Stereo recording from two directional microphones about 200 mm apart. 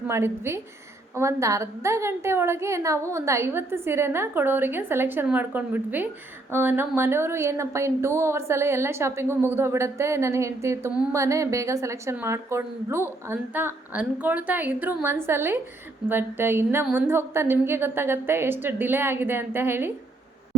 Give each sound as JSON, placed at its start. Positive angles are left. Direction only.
{"t": 0.1, "sound": "a woman's voice", "side_deg": -10}